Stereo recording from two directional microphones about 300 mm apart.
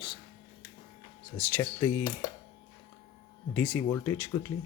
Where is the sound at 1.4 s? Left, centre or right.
Centre.